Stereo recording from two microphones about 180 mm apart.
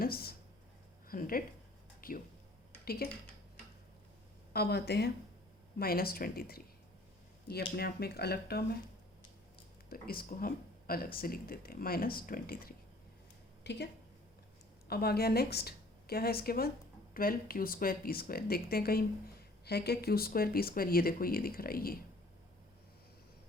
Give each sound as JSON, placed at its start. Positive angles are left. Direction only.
{"t": 0.0, "sound": "a sound", "side_deg": 55}
{"t": 1.0, "sound": "speech", "side_deg": 50}
{"t": 2.0, "sound": "a sound", "side_deg": 50}
{"t": 2.8, "sound": "speech", "side_deg": 60}
{"t": 4.5, "sound": "speech", "side_deg": 60}
{"t": 9.9, "sound": "speech", "side_deg": 55}
{"t": 13.7, "sound": "a woman's voice", "side_deg": 70}
{"t": 14.8, "sound": "speech", "side_deg": 60}